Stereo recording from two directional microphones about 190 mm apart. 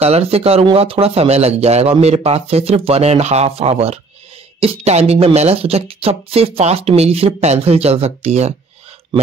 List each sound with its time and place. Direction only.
0.0 s speech: 35° right (ahead or behind)